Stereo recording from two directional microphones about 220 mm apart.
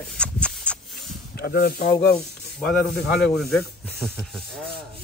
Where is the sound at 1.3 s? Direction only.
45° left (ahead or behind).